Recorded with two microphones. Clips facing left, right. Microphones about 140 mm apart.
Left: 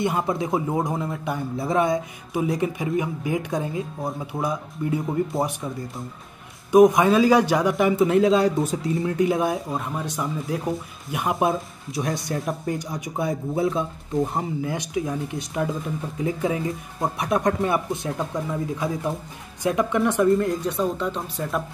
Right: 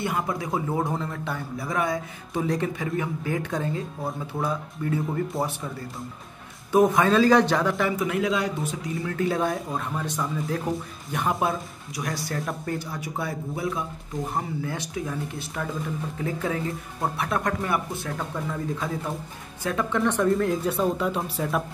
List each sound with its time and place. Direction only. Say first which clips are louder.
0.0 s speech: left 4 dB; 25° left (ahead or behind)
2.3 s a man's voice: left 2 dB; 10° left (ahead or behind)
6.7 s a man's voice: left 4 dB; 15° left (ahead or behind)
11.3 s a man's voice: left 4 dB; 25° left (ahead or behind); by 21.6 s centre (ahead or behind)